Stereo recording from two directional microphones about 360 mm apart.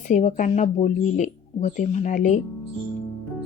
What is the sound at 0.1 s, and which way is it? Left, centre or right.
Speech, centre.